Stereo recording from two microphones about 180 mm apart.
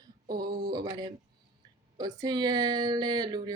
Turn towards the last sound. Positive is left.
turn(degrees=-25)  # may be behind; listen again after turning